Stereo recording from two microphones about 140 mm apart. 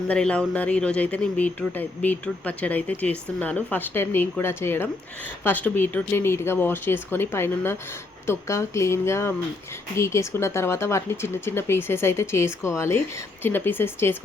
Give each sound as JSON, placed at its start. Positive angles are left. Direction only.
{"t": 0.1, "sound": "speech", "side_deg": 5}